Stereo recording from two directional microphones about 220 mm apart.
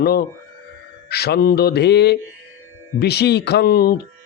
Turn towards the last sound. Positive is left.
turn(degrees=45)  # may be behind; listen again after turning